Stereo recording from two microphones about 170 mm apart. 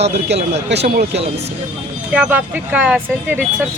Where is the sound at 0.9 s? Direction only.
60° right (ahead or behind).